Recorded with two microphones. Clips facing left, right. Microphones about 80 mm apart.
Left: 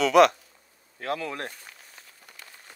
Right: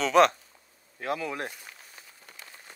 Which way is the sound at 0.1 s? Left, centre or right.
Right.